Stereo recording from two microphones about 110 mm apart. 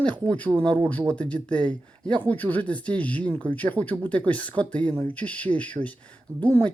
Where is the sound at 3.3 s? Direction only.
45° right (ahead or behind).